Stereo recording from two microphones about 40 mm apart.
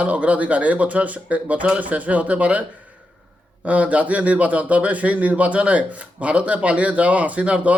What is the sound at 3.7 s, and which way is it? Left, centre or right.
Speech, right.